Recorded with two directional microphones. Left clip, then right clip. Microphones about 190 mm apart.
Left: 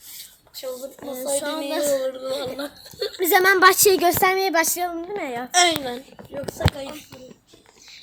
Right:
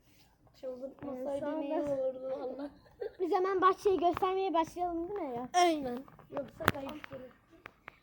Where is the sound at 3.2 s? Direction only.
40° left (ahead or behind); by 5.4 s 20° left (ahead or behind).